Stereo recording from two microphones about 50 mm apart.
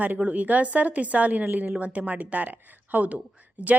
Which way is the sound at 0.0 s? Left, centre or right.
Right.